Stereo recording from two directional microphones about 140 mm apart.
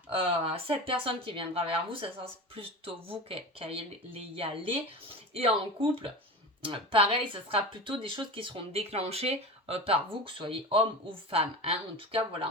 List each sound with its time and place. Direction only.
0.1 s speech: 40° right (ahead or behind)